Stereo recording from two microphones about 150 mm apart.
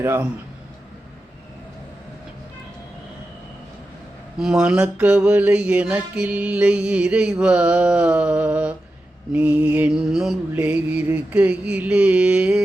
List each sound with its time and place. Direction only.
0.0 s mantra: 15° right (ahead or behind)
4.4 s mantra: 5° right (ahead or behind)